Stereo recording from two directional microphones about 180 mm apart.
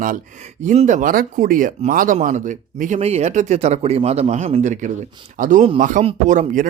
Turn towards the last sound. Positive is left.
turn(degrees=-45)  # may be behind; listen again after turning